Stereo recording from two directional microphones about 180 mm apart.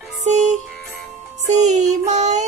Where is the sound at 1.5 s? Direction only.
40° right (ahead or behind).